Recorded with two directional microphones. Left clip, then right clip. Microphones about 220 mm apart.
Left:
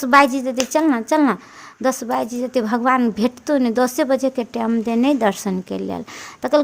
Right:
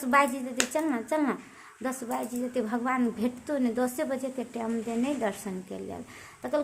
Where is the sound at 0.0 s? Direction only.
45° left (ahead or behind).